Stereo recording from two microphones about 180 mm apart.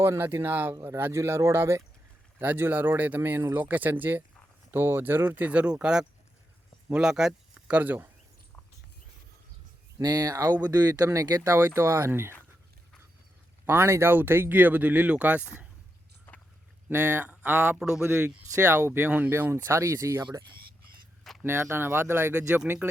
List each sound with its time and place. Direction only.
0.0 s speech: 10° right (ahead or behind)
10.0 s speech: 20° right (ahead or behind)
13.7 s speech: 15° right (ahead or behind)
16.3 s a sound: 10° left (ahead or behind)
16.9 s speech: 15° right (ahead or behind)
17.7 s speech: 5° right (ahead or behind)
20.2 s speech: 25° right (ahead or behind)
21.4 s speech: 15° right (ahead or behind)